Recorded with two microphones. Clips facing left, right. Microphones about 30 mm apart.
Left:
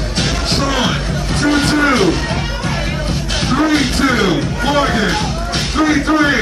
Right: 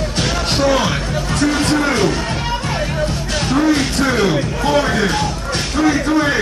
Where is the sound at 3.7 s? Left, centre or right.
Left.